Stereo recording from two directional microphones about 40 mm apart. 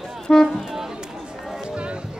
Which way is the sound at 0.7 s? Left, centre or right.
Centre.